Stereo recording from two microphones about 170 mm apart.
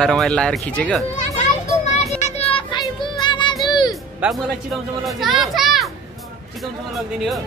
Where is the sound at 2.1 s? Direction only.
40° left (ahead or behind).